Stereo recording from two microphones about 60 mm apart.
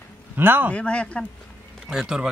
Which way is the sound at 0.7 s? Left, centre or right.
Centre.